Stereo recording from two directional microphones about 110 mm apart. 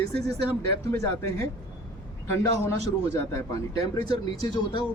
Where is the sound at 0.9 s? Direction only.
25° left (ahead or behind).